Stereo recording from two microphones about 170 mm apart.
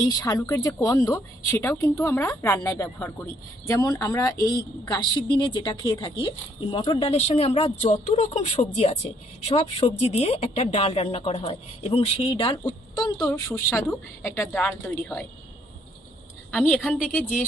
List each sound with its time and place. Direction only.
0.1 s a woman's voice: 20° left (ahead or behind)
14.5 s speech: 10° left (ahead or behind)
16.5 s a woman's voice: centre (ahead or behind)